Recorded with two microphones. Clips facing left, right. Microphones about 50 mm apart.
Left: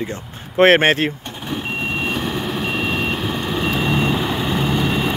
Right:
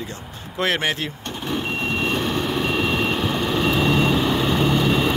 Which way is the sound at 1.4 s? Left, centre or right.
Centre.